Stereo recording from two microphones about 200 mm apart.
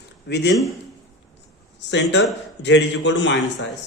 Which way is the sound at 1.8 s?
60° left (ahead or behind).